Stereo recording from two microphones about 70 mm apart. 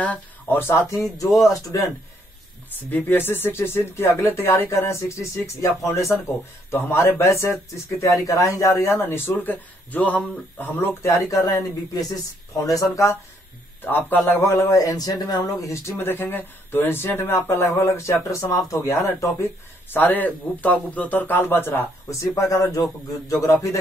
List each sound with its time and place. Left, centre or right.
0.0 s a sound: left
0.6 s speech: left
1.4 s speech: left
2.9 s speech: left
11.0 s speech: left
13.8 s a man's voice: left
14.4 s speech: left
15.7 s speech: left
16.1 s speech: left
22.1 s speech: left